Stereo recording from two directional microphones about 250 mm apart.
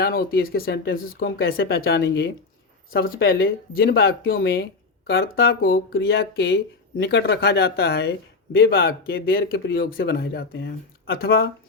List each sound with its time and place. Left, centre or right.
0.0 s speech: left